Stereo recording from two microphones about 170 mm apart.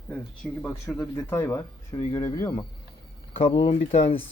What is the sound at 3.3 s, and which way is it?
Speech, 35° left (ahead or behind).